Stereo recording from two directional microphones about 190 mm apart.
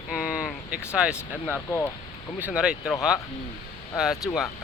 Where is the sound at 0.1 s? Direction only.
5° right (ahead or behind).